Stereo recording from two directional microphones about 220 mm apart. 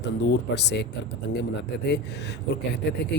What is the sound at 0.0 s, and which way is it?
Speech, 50° left (ahead or behind).